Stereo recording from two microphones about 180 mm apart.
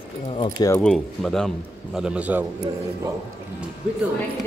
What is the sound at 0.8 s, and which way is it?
A man's voice, 5° left (ahead or behind).